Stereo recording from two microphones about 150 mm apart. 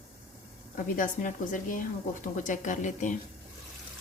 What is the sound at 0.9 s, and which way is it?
Speech, 60° left (ahead or behind).